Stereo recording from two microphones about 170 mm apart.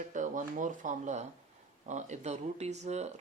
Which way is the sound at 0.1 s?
50° right (ahead or behind).